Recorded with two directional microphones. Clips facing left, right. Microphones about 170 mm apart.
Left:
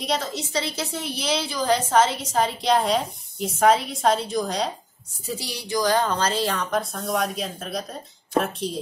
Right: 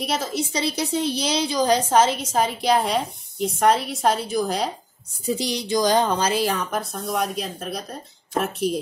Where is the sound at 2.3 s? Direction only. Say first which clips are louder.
Even; 5° right (ahead or behind).